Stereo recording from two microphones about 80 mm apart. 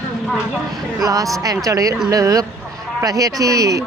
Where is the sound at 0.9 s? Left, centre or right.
Right.